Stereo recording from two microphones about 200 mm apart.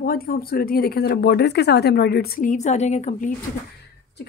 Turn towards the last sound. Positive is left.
turn(degrees=35)  # may be behind; listen again after turning